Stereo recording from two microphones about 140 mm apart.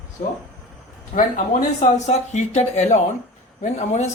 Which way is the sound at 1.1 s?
75° left (ahead or behind).